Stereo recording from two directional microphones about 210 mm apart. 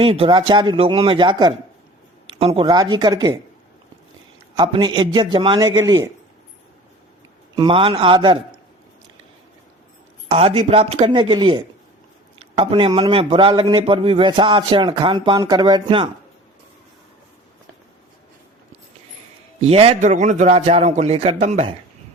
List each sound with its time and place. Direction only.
0.0 s a man's voice: 25° right (ahead or behind)
4.5 s a man's voice: 20° right (ahead or behind)
7.5 s a man's voice: 20° right (ahead or behind)
10.2 s a man's voice: 30° right (ahead or behind)
19.6 s a man's voice: 30° right (ahead or behind)